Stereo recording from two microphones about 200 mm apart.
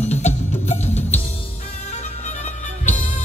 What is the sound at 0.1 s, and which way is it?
Music, 35° left (ahead or behind).